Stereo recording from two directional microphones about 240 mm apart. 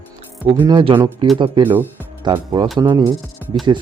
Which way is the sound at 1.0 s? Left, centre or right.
Centre.